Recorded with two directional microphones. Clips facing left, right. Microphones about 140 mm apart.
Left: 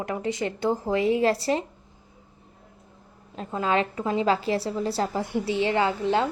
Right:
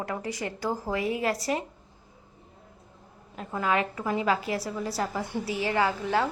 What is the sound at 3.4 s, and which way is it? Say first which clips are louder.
A woman's voice: left 2 dB; 25° left (ahead or behind).